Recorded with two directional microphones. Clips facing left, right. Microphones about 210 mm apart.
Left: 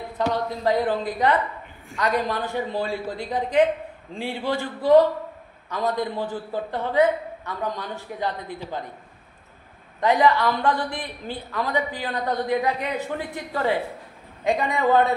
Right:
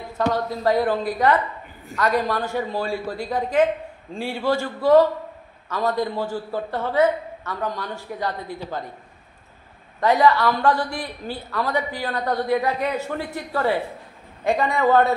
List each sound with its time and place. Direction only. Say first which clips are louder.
0.3 s a man's voice: right 2 dB; 20° left (ahead or behind)
9.9 s a man's voice: right 2 dB; 15° left (ahead or behind)